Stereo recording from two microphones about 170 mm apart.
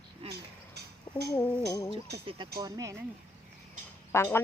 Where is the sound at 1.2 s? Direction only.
20° left (ahead or behind).